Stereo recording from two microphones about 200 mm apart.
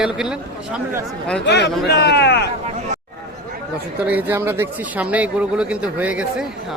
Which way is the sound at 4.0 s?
10° right (ahead or behind).